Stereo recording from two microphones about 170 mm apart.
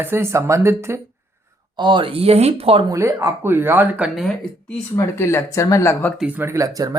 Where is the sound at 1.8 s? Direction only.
30° right (ahead or behind).